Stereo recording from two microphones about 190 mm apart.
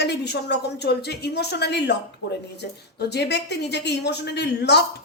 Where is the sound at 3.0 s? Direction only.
60° left (ahead or behind).